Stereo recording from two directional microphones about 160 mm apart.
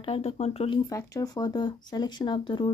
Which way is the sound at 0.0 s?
40° left (ahead or behind).